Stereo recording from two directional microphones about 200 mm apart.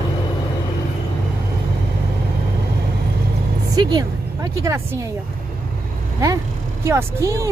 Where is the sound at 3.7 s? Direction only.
20° right (ahead or behind).